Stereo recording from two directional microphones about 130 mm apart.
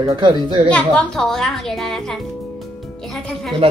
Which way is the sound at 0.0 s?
35° right (ahead or behind).